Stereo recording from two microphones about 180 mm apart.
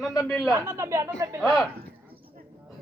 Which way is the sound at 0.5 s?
15° right (ahead or behind).